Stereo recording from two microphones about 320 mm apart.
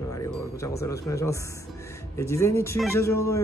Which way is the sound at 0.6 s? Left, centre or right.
Centre.